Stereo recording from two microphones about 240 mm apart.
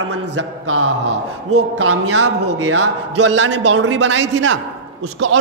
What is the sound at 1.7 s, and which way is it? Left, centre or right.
A man's voice, right.